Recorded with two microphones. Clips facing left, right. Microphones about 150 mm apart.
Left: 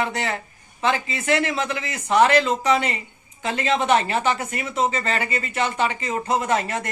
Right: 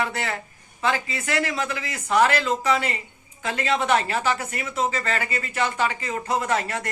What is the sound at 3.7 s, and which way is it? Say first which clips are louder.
A man's voice: left 2 dB; 20° left (ahead or behind).